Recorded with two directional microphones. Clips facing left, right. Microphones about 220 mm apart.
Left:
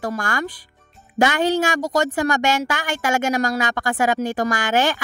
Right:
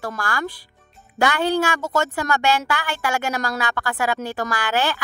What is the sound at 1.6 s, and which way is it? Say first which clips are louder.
Speech: left 2 dB; 40° left (ahead or behind).